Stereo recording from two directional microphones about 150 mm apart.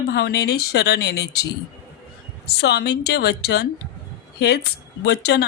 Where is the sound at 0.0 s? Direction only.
90° left.